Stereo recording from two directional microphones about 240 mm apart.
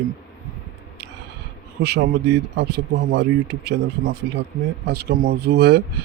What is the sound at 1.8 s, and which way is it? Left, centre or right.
Speech, right.